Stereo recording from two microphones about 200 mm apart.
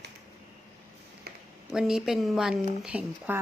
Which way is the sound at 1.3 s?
50° right (ahead or behind).